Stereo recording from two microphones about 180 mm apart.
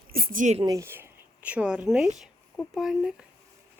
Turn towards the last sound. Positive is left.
turn(degrees=0)  # may be behind; listen again after turning